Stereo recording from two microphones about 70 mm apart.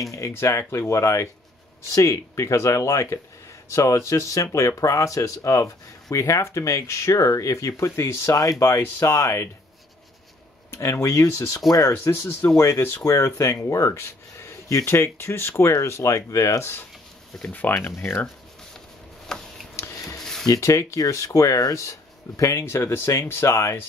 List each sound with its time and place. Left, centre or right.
0.1 s speech: left
8.3 s speech: left
10.7 s speech: left
17.4 s speech: left
17.7 s speech: left
19.3 s a sound: centre
19.7 s a sound: left
20.4 s speech: left